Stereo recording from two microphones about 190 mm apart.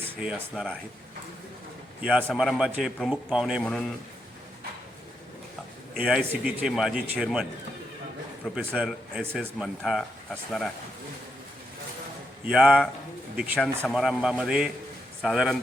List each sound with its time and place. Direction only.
0.0 s speech: 5° right (ahead or behind)
2.0 s a man's voice: 5° right (ahead or behind)
6.0 s a man's voice: 5° right (ahead or behind)
8.5 s a man's voice: centre (ahead or behind)
12.5 s a man's voice: 5° right (ahead or behind)